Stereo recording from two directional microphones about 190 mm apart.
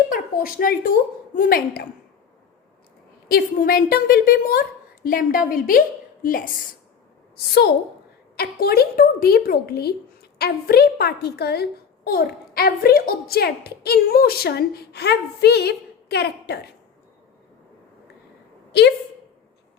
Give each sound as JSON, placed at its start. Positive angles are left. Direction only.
{"t": 0.1, "sound": "a woman's voice", "side_deg": 50}
{"t": 3.2, "sound": "a woman's voice", "side_deg": 50}
{"t": 8.4, "sound": "a woman's voice", "side_deg": 55}
{"t": 18.7, "sound": "a woman's voice", "side_deg": 60}